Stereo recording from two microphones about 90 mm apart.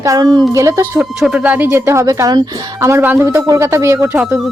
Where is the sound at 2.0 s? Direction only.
40° right (ahead or behind).